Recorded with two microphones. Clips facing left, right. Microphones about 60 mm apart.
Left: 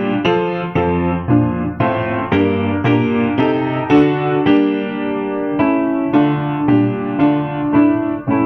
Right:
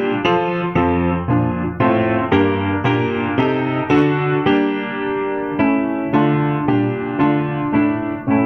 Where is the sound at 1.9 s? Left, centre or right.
Centre.